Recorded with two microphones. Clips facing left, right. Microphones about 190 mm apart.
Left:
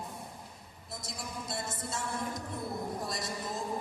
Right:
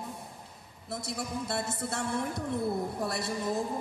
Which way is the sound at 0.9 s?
65° right (ahead or behind).